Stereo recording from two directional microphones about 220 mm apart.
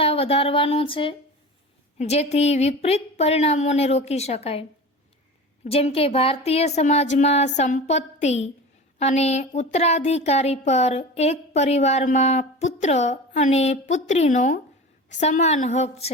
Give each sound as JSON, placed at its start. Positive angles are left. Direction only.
{"t": 0.0, "sound": "speech", "side_deg": 25}
{"t": 5.6, "sound": "speech", "side_deg": 25}